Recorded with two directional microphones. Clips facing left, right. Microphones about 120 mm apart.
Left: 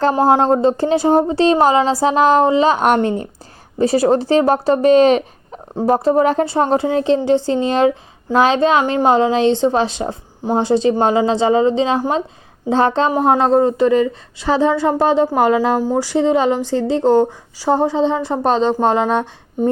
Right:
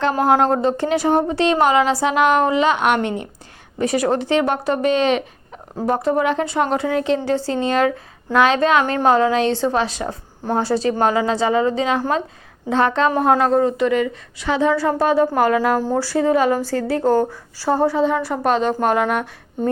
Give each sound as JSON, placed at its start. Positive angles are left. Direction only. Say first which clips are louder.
{"t": 0.1, "sound": "speech", "louder": "left 1 dB", "side_deg": 25}
{"t": 8.8, "sound": "a woman's voice", "louder": "left 2 dB", "side_deg": 20}
{"t": 13.1, "sound": "speech", "louder": "left 2 dB", "side_deg": 20}
{"t": 14.7, "sound": "a woman's voice", "louder": "left 2 dB", "side_deg": 20}